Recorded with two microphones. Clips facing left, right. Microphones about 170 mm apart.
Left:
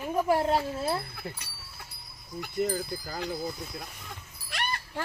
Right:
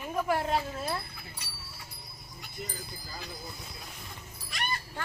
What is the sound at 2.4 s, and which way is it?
Speech, 60° left (ahead or behind).